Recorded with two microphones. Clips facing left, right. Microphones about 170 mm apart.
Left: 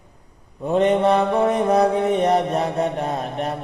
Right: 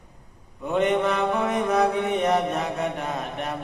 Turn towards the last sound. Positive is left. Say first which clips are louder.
# left 5 dB
turn(degrees=35)  # may be behind; listen again after turning